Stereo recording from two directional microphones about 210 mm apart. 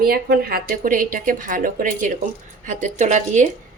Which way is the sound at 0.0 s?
45° right (ahead or behind).